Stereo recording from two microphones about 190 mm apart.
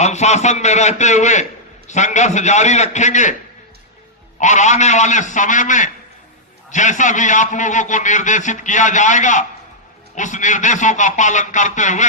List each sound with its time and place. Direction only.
0.0 s a man's voice: 35° left (ahead or behind)
4.4 s a man's voice: 40° left (ahead or behind)